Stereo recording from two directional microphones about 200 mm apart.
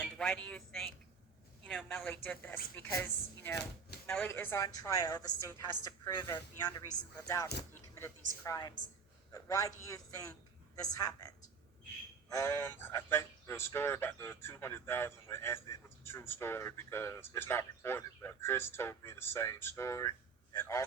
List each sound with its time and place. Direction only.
0.0 s speech: 5° left (ahead or behind)